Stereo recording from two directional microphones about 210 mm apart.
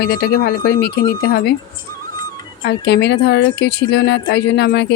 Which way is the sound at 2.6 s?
50° left (ahead or behind).